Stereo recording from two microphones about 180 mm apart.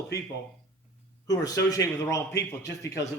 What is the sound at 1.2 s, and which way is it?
Speech, 20° left (ahead or behind).